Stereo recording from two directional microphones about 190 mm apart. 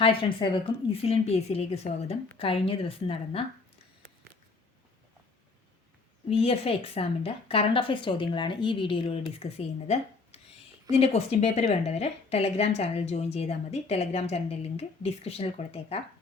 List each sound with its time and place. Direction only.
0.0 s a woman's voice: 30° left (ahead or behind)
6.2 s a woman's voice: 30° left (ahead or behind)